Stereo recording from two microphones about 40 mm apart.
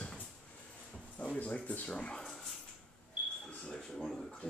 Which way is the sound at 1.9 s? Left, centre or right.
Left.